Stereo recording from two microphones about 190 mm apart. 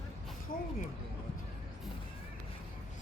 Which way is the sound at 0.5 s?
50° left (ahead or behind).